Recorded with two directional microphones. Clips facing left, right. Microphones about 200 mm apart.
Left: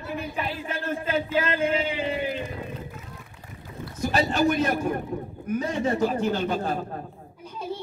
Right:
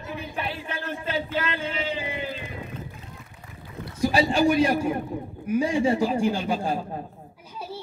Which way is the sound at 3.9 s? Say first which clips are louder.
Right 2 dB; 10° right (ahead or behind).